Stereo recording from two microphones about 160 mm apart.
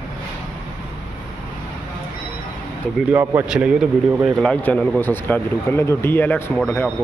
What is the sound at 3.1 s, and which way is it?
Speech, 10° right (ahead or behind).